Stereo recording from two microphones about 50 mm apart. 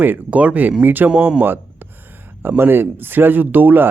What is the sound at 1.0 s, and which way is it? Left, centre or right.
Speech, right.